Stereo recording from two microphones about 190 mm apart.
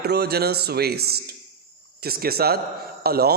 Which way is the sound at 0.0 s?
55° right (ahead or behind).